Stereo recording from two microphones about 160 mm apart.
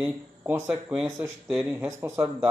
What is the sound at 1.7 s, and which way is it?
Speech, 15° right (ahead or behind).